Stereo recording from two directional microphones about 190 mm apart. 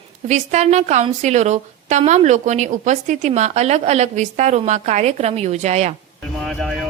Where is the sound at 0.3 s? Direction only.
40° right (ahead or behind).